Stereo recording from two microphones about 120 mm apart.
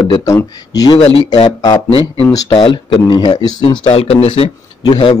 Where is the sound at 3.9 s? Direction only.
55° left (ahead or behind).